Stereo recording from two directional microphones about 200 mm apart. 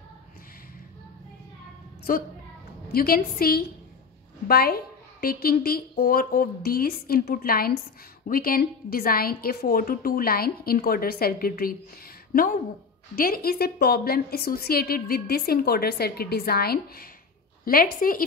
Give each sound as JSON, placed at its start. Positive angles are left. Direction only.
{"t": 2.1, "sound": "a woman's voice", "side_deg": 45}